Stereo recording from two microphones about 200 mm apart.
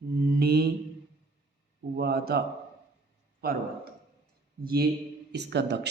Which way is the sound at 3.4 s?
50° right (ahead or behind).